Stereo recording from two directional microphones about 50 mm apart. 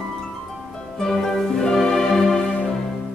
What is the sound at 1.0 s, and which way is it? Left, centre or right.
Music, centre.